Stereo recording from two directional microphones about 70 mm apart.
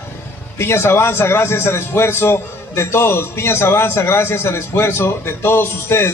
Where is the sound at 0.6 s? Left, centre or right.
Left.